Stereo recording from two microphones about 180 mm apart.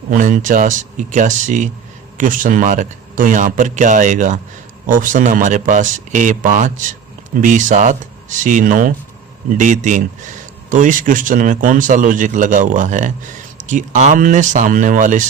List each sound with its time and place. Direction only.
0.1 s speech: 50° right (ahead or behind)